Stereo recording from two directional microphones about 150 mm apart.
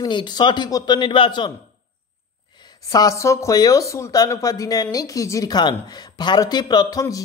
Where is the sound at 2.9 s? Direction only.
20° left (ahead or behind).